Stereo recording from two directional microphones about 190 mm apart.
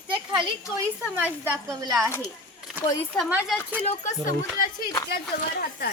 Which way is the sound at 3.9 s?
40° left (ahead or behind).